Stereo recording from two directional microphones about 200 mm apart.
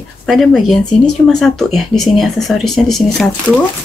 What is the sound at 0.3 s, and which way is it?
Speech, centre (ahead or behind).